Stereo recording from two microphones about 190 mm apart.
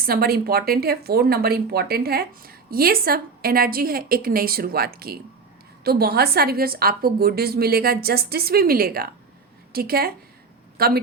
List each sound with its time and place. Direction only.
0.0 s a woman's voice: 55° right (ahead or behind)